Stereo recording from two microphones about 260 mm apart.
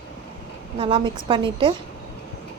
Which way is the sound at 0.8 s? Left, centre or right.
Centre.